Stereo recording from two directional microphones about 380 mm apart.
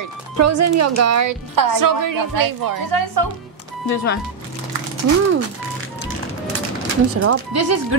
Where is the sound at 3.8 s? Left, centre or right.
Left.